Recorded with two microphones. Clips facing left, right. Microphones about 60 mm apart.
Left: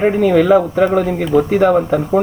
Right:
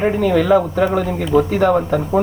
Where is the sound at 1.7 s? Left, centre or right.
Centre.